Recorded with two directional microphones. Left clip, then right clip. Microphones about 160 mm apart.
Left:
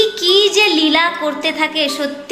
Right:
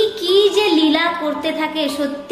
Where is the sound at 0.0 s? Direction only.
5° left (ahead or behind).